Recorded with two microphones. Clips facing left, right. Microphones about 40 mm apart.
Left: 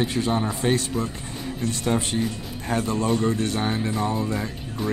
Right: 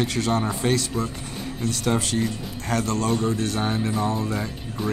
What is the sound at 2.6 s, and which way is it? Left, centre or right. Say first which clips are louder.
Speech: even; centre.